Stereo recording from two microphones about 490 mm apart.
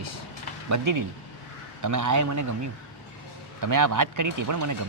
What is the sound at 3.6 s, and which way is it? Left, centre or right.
Speech, right.